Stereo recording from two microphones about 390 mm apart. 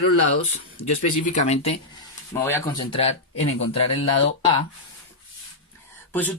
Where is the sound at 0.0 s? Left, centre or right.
Left.